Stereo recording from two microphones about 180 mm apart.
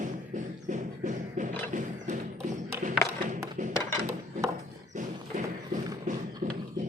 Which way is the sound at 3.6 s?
45° right (ahead or behind).